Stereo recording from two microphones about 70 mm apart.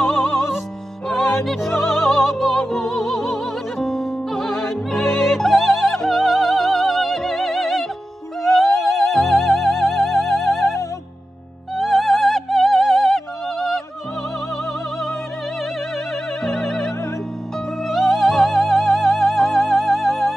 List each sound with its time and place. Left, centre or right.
1.0 s music: centre
8.6 s music: left
9.1 s music: centre
11.7 s music: centre
16.4 s music: centre